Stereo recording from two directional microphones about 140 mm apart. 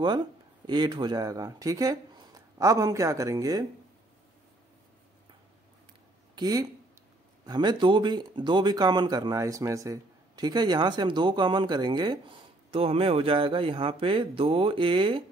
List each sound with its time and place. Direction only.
0.7 s speech: 30° right (ahead or behind)
6.3 s speech: 25° right (ahead or behind)
12.7 s speech: 45° right (ahead or behind)